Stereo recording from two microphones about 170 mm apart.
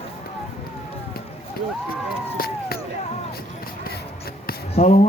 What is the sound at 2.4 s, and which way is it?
Speech, 60° left (ahead or behind).